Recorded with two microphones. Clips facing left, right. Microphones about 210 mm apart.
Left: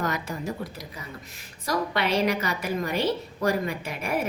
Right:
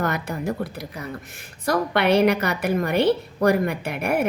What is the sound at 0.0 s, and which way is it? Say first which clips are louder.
A woman's voice: right 4 dB; 60° right (ahead or behind).